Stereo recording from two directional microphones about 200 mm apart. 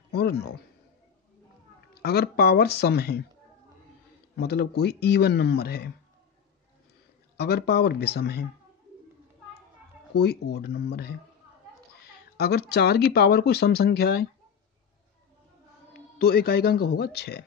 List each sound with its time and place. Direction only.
0.1 s speech: 50° left (ahead or behind)
2.0 s speech: 50° left (ahead or behind)
4.4 s speech: 50° left (ahead or behind)
7.3 s speech: 50° left (ahead or behind)
10.1 s speech: 55° left (ahead or behind)
12.4 s speech: 55° left (ahead or behind)
15.9 s speech: 50° left (ahead or behind)